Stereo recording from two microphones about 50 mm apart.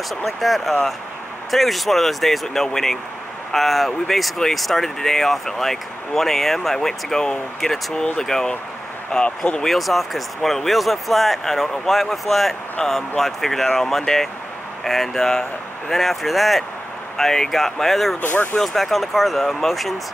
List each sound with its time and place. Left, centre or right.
0.1 s speech: centre
9.8 s speech: centre
18.2 s speech: left
18.6 s speech: centre